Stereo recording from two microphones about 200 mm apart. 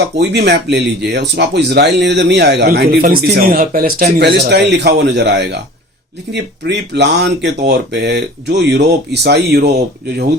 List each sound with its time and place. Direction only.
0.2 s speech: 55° right (ahead or behind)